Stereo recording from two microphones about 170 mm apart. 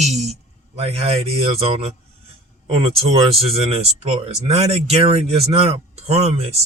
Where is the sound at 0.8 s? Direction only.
35° right (ahead or behind).